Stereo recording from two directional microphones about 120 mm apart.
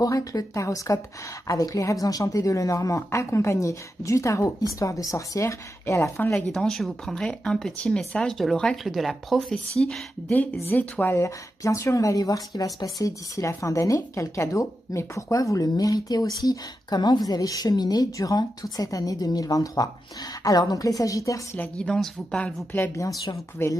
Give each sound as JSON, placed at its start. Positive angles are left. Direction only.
{"t": 0.0, "sound": "a woman's voice", "side_deg": 30}
{"t": 6.5, "sound": "speech", "side_deg": 5}
{"t": 10.7, "sound": "a woman's voice", "side_deg": 15}
{"t": 21.5, "sound": "a woman's voice", "side_deg": 5}
{"t": 22.9, "sound": "a woman's voice", "side_deg": 25}